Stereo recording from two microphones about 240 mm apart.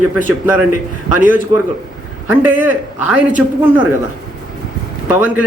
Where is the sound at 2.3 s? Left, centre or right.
Centre.